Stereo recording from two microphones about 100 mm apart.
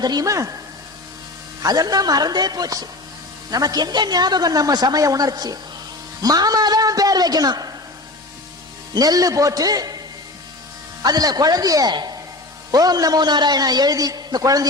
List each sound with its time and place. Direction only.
0.0 s speech: 40° right (ahead or behind)
1.6 s a man's voice: 40° right (ahead or behind)
9.0 s speech: 35° right (ahead or behind)
11.0 s speech: 40° right (ahead or behind)